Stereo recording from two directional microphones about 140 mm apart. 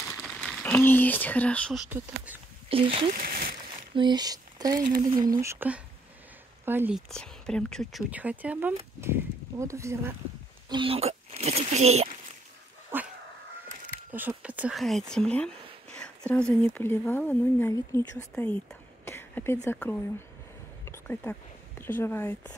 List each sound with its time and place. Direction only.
0.4 s a sound: 5° left (ahead or behind)
1.8 s speech: 10° right (ahead or behind)
2.7 s speech: 40° right (ahead or behind)
3.1 s speech: 90° right
3.9 s speech: 30° right (ahead or behind); by 7.0 s 15° right (ahead or behind)
7.1 s speech: 5° left (ahead or behind)
8.1 s speech: 10° right (ahead or behind)
10.7 s speech: 40° right (ahead or behind)
12.9 s dog: 15° right (ahead or behind)
14.1 s speech: 10° right (ahead or behind)
14.8 s speech: centre (ahead or behind)